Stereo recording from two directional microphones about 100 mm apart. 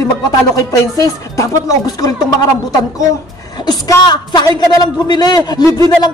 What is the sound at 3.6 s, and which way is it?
A woman's voice, 45° left (ahead or behind).